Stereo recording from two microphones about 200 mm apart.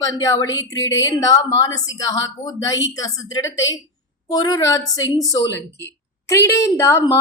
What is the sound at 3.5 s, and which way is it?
Speech, 70° left (ahead or behind).